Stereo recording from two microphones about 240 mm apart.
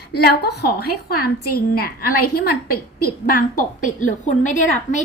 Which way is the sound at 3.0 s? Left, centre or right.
Left.